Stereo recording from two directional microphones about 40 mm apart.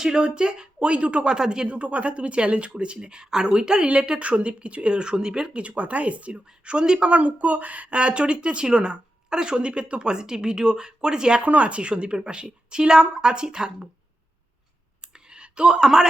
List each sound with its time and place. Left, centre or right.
0.0 s speech: centre
1.3 s speech: centre
1.6 s speech: right; by 3.8 s centre
3.8 s speech: right
5.5 s speech: right
6.3 s speech: right
7.1 s speech: right; by 11.4 s centre
11.4 s speech: right
15.0 s clicking: right